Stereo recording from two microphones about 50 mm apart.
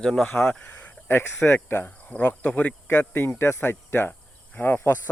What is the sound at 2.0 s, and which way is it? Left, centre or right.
Cricket, left.